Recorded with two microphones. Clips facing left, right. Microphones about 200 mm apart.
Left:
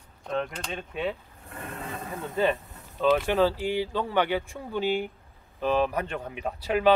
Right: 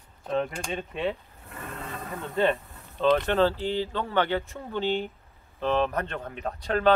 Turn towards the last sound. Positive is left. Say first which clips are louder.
# left 1 dB
turn(degrees=10)  # may be behind; listen again after turning